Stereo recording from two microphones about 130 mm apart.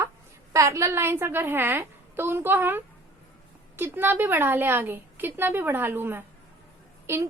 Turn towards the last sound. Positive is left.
turn(degrees=-20)  # may be behind; listen again after turning